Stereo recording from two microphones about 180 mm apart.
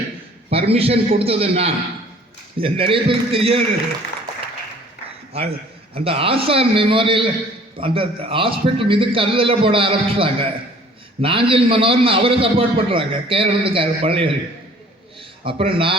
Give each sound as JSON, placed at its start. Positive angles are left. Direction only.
{"t": 0.5, "sound": "a man's voice", "side_deg": -35}
{"t": 5.3, "sound": "a man's voice", "side_deg": -35}
{"t": 15.4, "sound": "a man's voice", "side_deg": -30}